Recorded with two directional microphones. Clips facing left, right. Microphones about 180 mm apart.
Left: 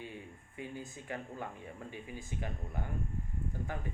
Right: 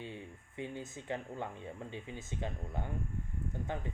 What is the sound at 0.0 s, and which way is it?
Speech, 25° right (ahead or behind).